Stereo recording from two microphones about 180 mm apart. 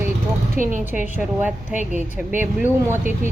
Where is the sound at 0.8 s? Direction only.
10° right (ahead or behind).